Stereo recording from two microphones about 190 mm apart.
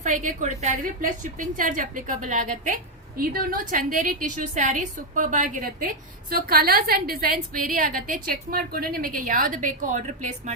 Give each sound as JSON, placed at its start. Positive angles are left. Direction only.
{"t": 0.0, "sound": "a woman's voice", "side_deg": -40}
{"t": 6.3, "sound": "a woman's voice", "side_deg": -55}